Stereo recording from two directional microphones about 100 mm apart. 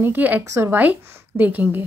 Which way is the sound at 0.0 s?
15° right (ahead or behind).